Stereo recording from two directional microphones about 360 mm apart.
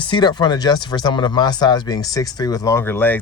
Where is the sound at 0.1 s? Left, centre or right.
Centre.